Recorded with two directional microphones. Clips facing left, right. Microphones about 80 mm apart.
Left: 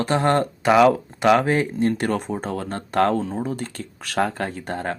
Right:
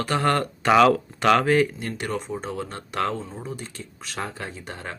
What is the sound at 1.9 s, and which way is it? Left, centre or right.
Speech, left.